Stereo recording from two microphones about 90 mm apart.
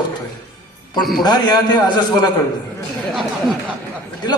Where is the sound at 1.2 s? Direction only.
50° left (ahead or behind).